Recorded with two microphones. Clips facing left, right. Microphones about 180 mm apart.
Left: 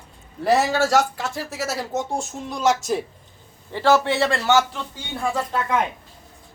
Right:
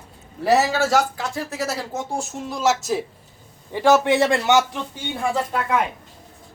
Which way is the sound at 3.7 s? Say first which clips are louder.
Right 2 dB; 15° right (ahead or behind).